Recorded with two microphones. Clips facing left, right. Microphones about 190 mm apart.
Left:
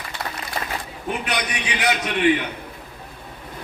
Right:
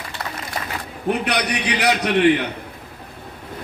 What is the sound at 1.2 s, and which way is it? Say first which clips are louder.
Speech: right 4 dB; 65° right (ahead or behind).